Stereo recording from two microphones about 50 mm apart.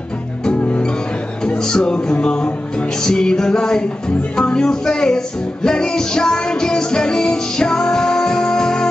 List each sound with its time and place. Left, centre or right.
0.5 s music: left